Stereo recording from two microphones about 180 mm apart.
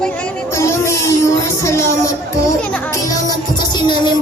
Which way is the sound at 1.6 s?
15° left (ahead or behind).